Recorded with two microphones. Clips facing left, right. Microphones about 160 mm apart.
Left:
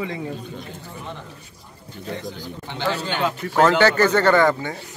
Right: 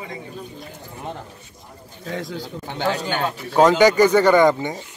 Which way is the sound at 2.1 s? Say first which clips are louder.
Right 3 dB; 90° right.